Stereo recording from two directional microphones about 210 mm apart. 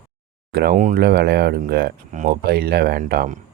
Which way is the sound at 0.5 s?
45° right (ahead or behind).